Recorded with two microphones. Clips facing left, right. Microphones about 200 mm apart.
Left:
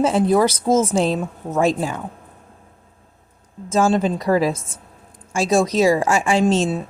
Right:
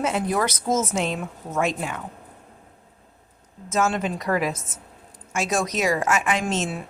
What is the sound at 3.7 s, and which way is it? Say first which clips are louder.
A woman's voice: left 6 dB; 30° left (ahead or behind).